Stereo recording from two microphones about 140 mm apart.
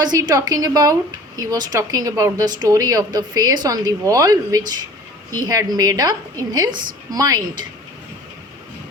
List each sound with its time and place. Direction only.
0.0 s a woman's voice: 30° right (ahead or behind)